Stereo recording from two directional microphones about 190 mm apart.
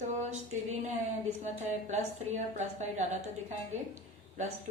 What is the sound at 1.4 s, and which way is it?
A woman's voice, 40° right (ahead or behind).